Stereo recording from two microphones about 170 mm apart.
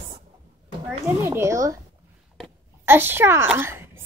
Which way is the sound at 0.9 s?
15° right (ahead or behind).